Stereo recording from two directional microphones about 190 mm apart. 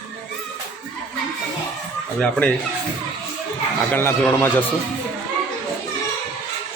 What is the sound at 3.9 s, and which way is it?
Speech, 10° left (ahead or behind).